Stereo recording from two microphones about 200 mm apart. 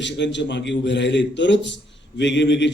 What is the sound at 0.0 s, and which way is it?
A man's voice, 60° left (ahead or behind).